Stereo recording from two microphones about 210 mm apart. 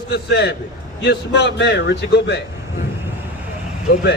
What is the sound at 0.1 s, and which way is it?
A man's voice, 50° left (ahead or behind).